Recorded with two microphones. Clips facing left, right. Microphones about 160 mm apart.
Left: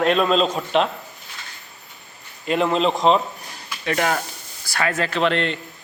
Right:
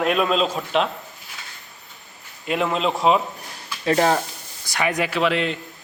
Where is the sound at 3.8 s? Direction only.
30° right (ahead or behind).